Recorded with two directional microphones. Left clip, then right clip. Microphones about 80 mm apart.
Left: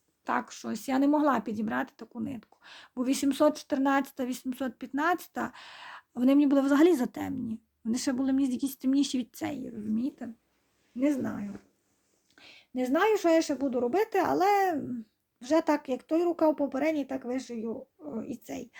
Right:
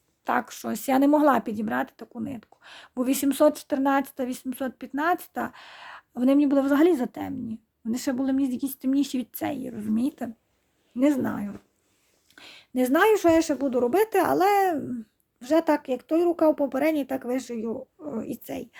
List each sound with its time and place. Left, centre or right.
0.3 s speech: right
9.6 s a woman's voice: right
16.6 s a woman's voice: right
18.4 s speech: right